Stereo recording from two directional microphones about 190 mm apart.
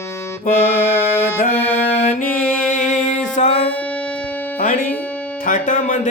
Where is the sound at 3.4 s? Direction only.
35° left (ahead or behind).